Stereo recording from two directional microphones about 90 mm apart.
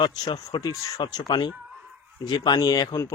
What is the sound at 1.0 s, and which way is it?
A man's voice, 55° left (ahead or behind).